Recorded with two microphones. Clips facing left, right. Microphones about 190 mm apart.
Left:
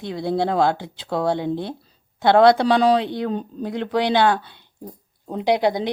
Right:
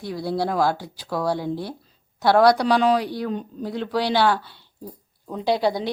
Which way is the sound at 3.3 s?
35° left (ahead or behind).